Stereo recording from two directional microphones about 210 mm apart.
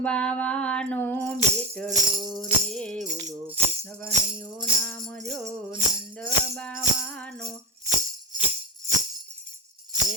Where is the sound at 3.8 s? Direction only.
10° left (ahead or behind).